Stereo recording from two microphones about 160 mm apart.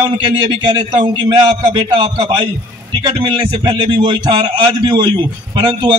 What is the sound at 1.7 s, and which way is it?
A man's voice, 30° right (ahead or behind).